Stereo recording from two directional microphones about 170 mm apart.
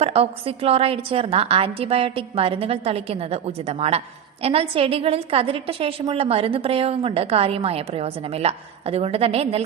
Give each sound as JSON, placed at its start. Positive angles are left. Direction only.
{"t": 0.0, "sound": "a woman's voice", "side_deg": -35}